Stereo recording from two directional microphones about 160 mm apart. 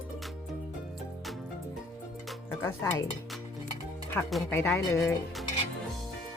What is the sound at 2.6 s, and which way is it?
Speech, 15° left (ahead or behind).